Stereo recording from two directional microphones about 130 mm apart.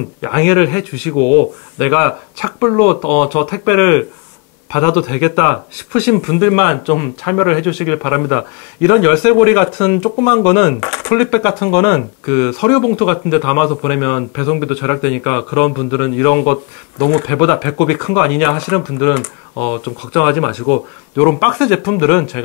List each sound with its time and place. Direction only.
0.2 s speech: 20° left (ahead or behind)